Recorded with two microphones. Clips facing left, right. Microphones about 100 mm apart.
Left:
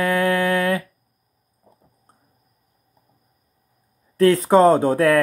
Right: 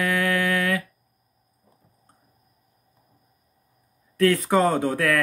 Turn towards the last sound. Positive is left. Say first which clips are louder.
# left 7 dB
turn(degrees=30)  # may be behind; listen again after turning